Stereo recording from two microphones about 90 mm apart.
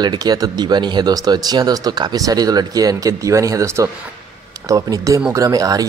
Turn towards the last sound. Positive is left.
turn(degrees=-40)  # may be behind; listen again after turning